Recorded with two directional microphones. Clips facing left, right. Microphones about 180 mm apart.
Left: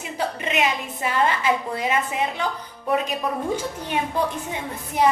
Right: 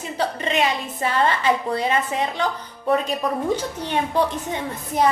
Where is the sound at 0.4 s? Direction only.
10° left (ahead or behind).